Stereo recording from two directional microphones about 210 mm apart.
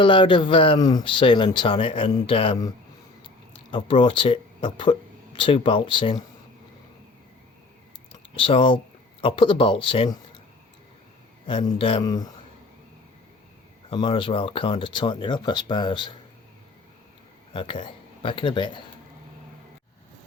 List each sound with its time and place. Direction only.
0.0 s speech: 25° left (ahead or behind)
8.4 s speech: 25° left (ahead or behind)
11.4 s speech: 25° left (ahead or behind)
13.9 s speech: 20° left (ahead or behind)
17.5 s speech: 25° left (ahead or behind)